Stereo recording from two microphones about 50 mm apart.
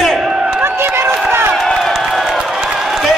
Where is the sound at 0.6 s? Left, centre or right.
Right.